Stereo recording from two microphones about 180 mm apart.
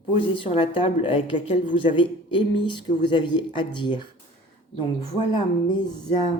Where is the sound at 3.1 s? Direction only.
25° left (ahead or behind).